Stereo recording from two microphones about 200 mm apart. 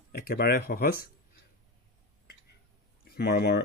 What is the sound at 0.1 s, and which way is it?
Speech, 50° left (ahead or behind).